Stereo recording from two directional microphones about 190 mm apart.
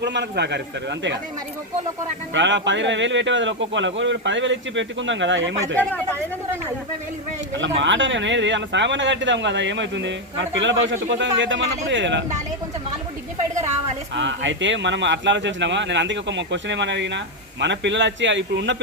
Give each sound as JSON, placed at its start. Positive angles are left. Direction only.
{"t": 0.0, "sound": "speech", "side_deg": -65}
{"t": 2.3, "sound": "speech", "side_deg": -75}
{"t": 5.8, "sound": "speech", "side_deg": 10}
{"t": 7.5, "sound": "speech", "side_deg": -75}
{"t": 14.2, "sound": "speech", "side_deg": -75}